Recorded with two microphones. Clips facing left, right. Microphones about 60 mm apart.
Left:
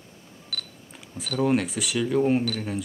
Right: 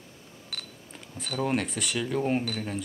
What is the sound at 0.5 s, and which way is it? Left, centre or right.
Camera, centre.